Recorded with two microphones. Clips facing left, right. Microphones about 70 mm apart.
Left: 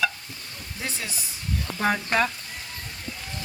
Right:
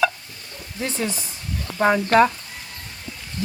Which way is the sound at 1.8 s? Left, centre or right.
Right.